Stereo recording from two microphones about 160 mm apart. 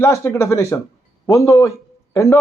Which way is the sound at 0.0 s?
15° left (ahead or behind).